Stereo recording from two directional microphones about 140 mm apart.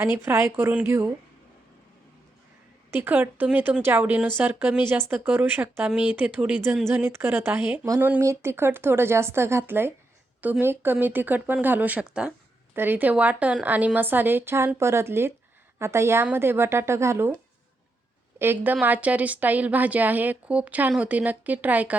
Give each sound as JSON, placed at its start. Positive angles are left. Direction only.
{"t": 0.0, "sound": "speech", "side_deg": -15}
{"t": 2.9, "sound": "a woman's voice", "side_deg": -15}
{"t": 18.3, "sound": "speech", "side_deg": -15}